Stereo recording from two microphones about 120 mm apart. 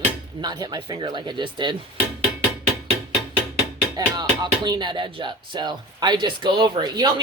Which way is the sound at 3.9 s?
35° right (ahead or behind).